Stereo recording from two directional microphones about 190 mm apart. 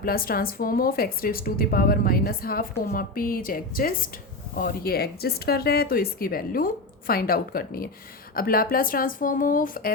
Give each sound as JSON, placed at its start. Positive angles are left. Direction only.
{"t": 0.0, "sound": "a woman's voice", "side_deg": 50}